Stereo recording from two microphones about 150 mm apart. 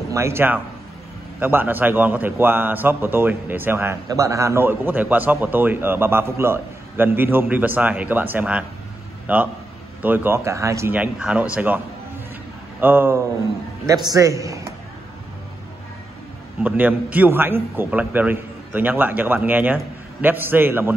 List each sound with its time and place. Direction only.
0.1 s a man's voice: 15° right (ahead or behind)
12.8 s a man's voice: 15° right (ahead or behind)
13.8 s a man's voice: 25° right (ahead or behind)
16.6 s a man's voice: 10° right (ahead or behind)